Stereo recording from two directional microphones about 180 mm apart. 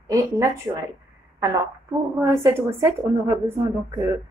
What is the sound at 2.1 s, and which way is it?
A woman's voice, 15° right (ahead or behind).